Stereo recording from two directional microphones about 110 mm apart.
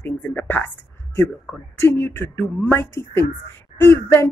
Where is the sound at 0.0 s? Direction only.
15° left (ahead or behind).